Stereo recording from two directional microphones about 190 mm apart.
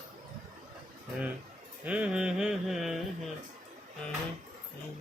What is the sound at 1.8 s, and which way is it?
Speech, 5° right (ahead or behind).